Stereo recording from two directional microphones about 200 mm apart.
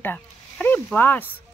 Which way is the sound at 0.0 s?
10° left (ahead or behind).